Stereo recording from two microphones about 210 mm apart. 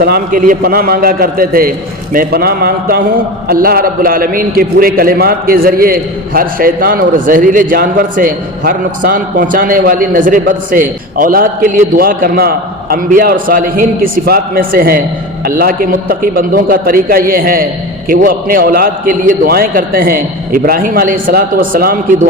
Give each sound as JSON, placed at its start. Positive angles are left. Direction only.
{"t": 0.0, "sound": "a man's voice", "side_deg": -45}